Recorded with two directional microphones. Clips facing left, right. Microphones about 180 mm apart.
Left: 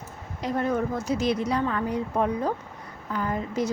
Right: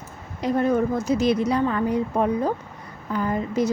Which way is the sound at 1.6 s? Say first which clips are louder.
Right 5 dB; 20° right (ahead or behind).